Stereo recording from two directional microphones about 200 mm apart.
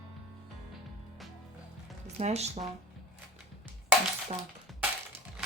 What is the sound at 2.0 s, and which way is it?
Speech, 35° right (ahead or behind).